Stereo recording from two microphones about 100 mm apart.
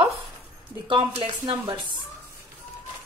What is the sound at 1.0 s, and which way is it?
Speech, 55° right (ahead or behind).